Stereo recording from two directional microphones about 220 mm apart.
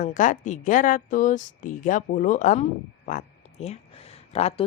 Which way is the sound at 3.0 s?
35° left (ahead or behind).